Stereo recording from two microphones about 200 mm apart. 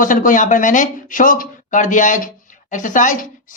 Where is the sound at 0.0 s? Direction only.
40° left (ahead or behind).